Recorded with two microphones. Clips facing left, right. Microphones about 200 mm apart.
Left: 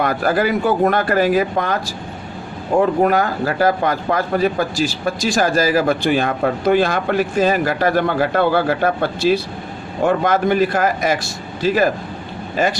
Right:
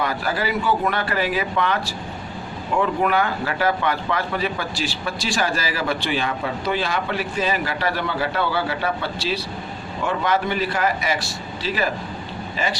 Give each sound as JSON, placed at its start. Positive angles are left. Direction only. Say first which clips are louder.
{"t": 0.0, "sound": "speech", "louder": "left 7 dB", "side_deg": 50}